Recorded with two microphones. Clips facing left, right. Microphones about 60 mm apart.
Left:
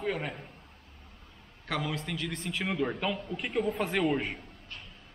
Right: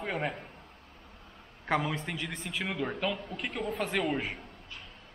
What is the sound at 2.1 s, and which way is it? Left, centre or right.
A man's voice, centre.